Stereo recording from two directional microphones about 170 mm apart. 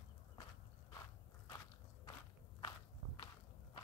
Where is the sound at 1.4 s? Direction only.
25° left (ahead or behind).